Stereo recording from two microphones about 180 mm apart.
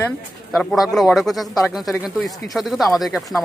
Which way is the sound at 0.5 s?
Centre (ahead or behind).